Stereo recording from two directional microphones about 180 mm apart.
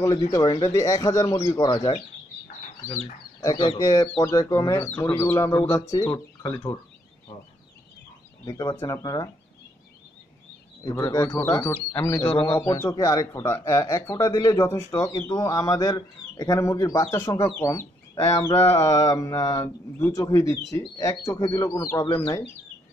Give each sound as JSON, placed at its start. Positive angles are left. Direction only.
{"t": 0.3, "sound": "speech", "side_deg": 20}
{"t": 3.3, "sound": "speech", "side_deg": 25}
{"t": 8.5, "sound": "speech", "side_deg": 20}
{"t": 10.8, "sound": "speech", "side_deg": 20}